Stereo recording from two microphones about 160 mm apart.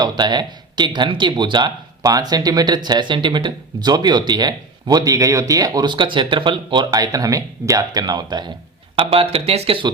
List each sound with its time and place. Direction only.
0.0 s speech: 30° right (ahead or behind)
9.0 s speech: 35° right (ahead or behind)